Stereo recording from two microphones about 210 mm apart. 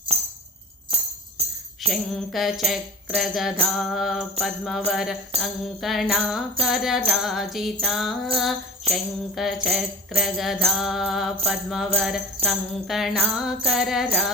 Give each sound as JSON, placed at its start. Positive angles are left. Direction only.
{"t": 1.4, "sound": "jingle bell", "side_deg": -30}
{"t": 1.9, "sound": "music", "side_deg": 0}